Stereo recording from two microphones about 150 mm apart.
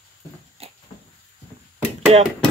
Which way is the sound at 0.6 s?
40° right (ahead or behind).